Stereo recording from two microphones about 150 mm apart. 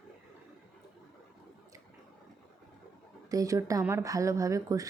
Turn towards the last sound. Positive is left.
turn(degrees=-20)  # may be behind; listen again after turning